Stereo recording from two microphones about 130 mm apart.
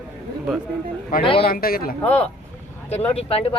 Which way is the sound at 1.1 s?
90° left.